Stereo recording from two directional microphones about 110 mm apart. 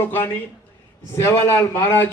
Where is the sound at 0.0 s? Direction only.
20° left (ahead or behind).